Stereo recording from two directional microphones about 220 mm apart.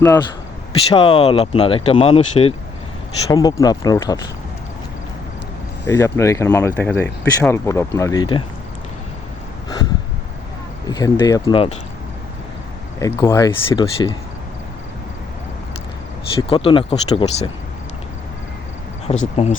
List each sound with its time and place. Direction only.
0.0 s speech: 15° left (ahead or behind)
3.2 s speech: 15° left (ahead or behind)
5.9 s speech: 10° left (ahead or behind)
10.8 s speech: 15° left (ahead or behind)
13.0 s speech: 15° left (ahead or behind)
16.5 s speech: 25° left (ahead or behind)
19.0 s speech: 30° left (ahead or behind)